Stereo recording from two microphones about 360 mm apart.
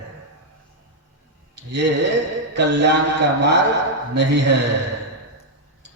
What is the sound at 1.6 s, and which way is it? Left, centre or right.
Speech, right.